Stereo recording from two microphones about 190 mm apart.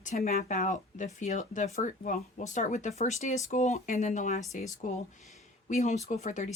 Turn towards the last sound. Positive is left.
turn(degrees=40)  # may be behind; listen again after turning